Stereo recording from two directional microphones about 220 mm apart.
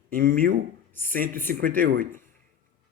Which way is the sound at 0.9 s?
10° left (ahead or behind).